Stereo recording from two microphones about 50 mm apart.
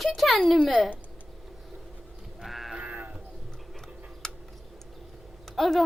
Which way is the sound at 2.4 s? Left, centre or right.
Centre.